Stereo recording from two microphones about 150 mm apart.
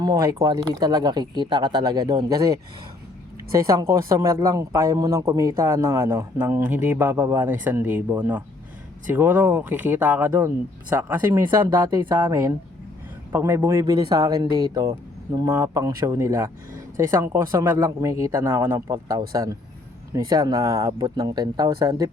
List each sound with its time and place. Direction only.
0.0 s speech: 25° right (ahead or behind)
3.6 s speech: 20° right (ahead or behind)